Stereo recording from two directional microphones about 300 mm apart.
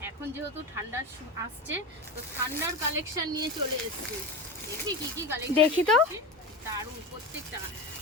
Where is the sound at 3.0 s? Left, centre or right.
Centre.